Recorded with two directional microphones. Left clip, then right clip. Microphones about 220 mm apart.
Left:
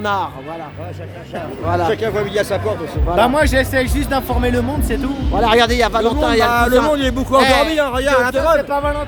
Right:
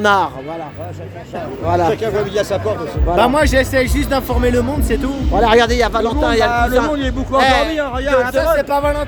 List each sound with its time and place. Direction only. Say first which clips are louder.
0.0 s speech: right 6 dB; 30° right (ahead or behind)
1.6 s speech: right 3 dB; 20° right (ahead or behind)
1.9 s speech: right 1 dB; 5° right (ahead or behind)
5.6 s speech: even; 5° left (ahead or behind)
6.5 s speech: left 2 dB; 45° left (ahead or behind)
7.3 s speech: even; centre (ahead or behind)
7.7 s speech: left 1 dB; 45° left (ahead or behind)
8.5 s speech: right 1 dB; 45° right (ahead or behind)